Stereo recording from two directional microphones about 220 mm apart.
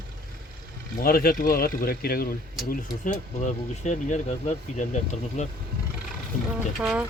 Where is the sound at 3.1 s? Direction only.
30° left (ahead or behind).